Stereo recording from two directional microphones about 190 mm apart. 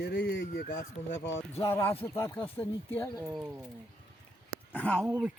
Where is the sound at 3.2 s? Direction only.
15° right (ahead or behind).